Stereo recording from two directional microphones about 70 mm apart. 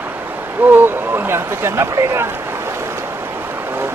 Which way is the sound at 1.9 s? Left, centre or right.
Right.